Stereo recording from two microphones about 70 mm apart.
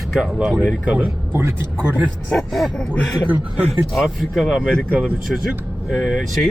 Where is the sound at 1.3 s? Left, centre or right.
Right.